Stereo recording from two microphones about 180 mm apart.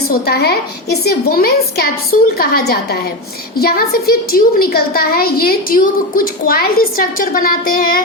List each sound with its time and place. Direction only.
0.1 s a woman's voice: 60° left (ahead or behind)